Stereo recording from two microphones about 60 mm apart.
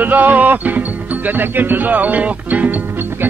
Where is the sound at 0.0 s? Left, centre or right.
Right.